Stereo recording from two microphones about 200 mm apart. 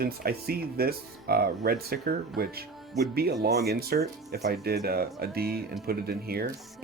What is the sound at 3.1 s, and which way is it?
Speech, 50° right (ahead or behind).